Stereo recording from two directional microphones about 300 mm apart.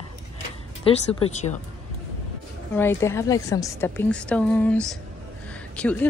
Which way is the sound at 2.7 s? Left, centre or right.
Centre.